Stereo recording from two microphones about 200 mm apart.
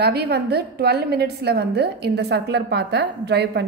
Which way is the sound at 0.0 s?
55° right (ahead or behind).